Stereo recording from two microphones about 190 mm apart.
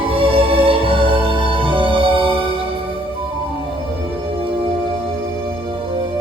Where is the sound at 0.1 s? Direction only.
30° right (ahead or behind).